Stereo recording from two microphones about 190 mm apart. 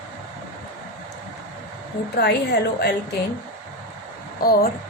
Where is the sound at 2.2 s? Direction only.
60° left (ahead or behind).